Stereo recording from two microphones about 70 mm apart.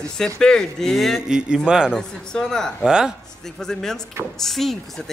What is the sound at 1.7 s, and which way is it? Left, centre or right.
Speech, centre.